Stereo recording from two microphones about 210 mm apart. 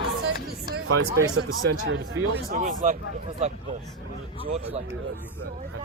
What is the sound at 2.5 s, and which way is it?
Speech, 35° right (ahead or behind).